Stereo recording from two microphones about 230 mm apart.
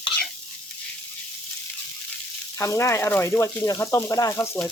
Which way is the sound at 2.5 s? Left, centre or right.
Centre.